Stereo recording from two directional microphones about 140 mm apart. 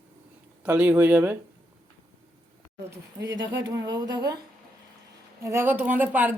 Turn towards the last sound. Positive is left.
turn(degrees=-10)  # may be behind; listen again after turning